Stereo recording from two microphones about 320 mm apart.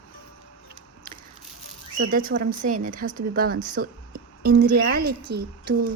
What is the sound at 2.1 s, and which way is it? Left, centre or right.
Speech, right.